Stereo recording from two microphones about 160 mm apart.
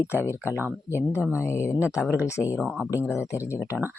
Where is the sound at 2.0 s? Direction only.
10° right (ahead or behind).